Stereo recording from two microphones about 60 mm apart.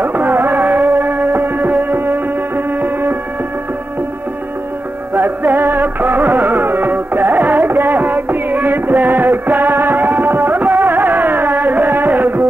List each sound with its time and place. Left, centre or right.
0.0 s music: right
5.1 s music: right